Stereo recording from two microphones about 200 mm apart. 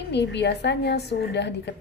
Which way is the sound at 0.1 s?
60° left (ahead or behind).